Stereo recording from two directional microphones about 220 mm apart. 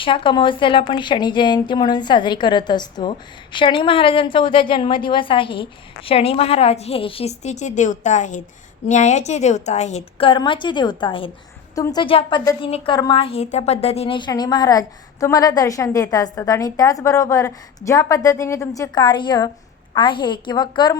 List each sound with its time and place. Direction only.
0.0 s a woman's voice: 25° left (ahead or behind)